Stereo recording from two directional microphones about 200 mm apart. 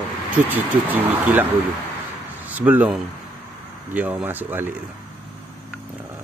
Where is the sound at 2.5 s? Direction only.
10° right (ahead or behind).